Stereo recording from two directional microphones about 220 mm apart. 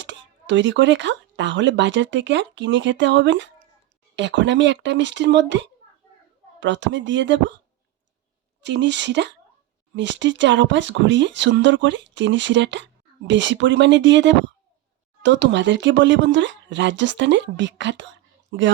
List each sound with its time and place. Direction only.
0.0 s speech: 55° right (ahead or behind)
8.6 s speech: 50° right (ahead or behind)